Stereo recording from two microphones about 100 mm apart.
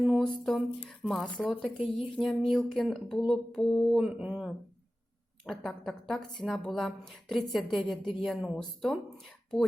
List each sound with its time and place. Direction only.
0.0 s a woman's voice: 5° right (ahead or behind)
4.2 s speech: 10° right (ahead or behind)
5.5 s a woman's voice: 5° left (ahead or behind)